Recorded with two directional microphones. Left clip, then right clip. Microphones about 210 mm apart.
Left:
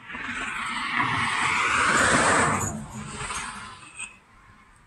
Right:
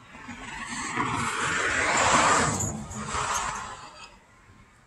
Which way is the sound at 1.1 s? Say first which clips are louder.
Left 4 dB; 25° left (ahead or behind).